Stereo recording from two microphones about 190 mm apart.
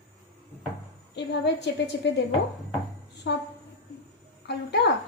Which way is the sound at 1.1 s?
65° left (ahead or behind).